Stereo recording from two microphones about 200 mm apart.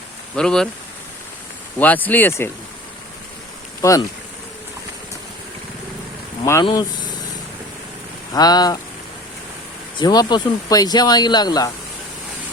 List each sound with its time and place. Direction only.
0.3 s speech: 5° left (ahead or behind)
1.8 s speech: 10° left (ahead or behind)
3.8 s speech: 15° left (ahead or behind)
6.4 s speech: 20° left (ahead or behind)
8.3 s speech: 20° left (ahead or behind)
10.0 s speech: 20° left (ahead or behind)